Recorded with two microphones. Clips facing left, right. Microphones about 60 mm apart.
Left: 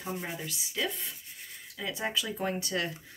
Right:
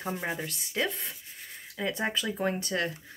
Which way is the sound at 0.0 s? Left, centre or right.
Right.